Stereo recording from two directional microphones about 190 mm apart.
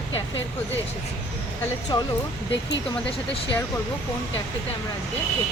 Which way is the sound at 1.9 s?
25° left (ahead or behind).